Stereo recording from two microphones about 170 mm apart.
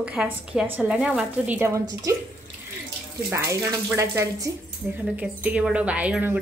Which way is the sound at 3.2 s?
15° right (ahead or behind).